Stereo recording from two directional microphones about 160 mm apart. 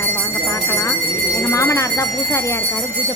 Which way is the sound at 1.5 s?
20° left (ahead or behind).